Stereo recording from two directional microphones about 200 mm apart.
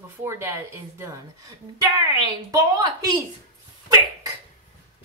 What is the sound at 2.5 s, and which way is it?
Speech, 15° right (ahead or behind).